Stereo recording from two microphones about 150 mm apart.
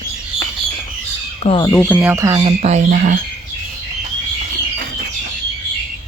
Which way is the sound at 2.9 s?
60° right (ahead or behind).